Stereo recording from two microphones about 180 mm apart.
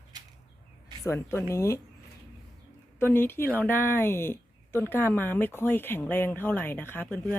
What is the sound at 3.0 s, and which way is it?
Speech, 10° left (ahead or behind).